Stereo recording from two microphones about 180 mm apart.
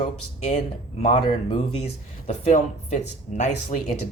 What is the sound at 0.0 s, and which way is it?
Speech, 40° left (ahead or behind).